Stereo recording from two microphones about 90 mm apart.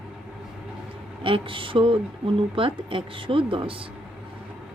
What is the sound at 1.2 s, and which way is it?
Speech, 80° right.